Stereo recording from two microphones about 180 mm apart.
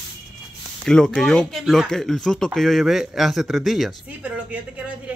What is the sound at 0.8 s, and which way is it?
A woman's voice, 5° left (ahead or behind).